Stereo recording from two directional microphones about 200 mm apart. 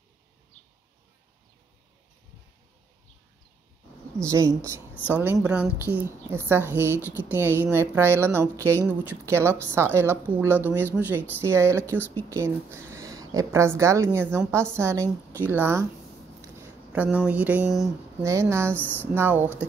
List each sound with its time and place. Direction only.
4.3 s a woman's voice: 15° right (ahead or behind)
18.2 s a woman's voice: 15° right (ahead or behind)
18.7 s speech: 10° left (ahead or behind)
19.1 s a woman's voice: 10° right (ahead or behind)